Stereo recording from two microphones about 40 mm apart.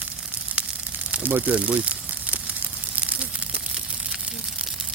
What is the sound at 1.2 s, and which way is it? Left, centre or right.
Speech, right.